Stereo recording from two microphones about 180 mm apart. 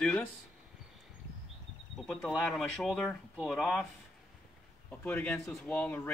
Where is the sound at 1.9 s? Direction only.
Centre (ahead or behind).